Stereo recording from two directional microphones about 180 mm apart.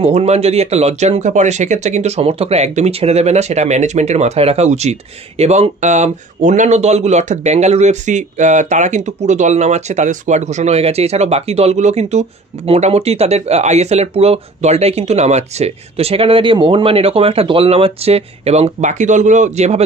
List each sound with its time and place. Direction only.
0.0 s speech: 35° right (ahead or behind)